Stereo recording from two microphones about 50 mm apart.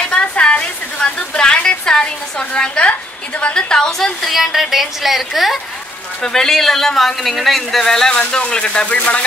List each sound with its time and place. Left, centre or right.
0.0 s a sound: left
2.9 s speech: left
4.3 s a woman's voice: centre
6.2 s speech: centre; by 9.2 s left